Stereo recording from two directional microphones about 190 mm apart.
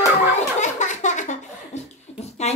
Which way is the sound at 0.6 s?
40° left (ahead or behind).